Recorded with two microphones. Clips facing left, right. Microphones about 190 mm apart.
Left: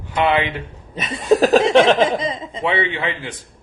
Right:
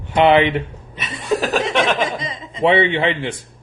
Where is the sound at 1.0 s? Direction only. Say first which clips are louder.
Left 6 dB; 40° left (ahead or behind).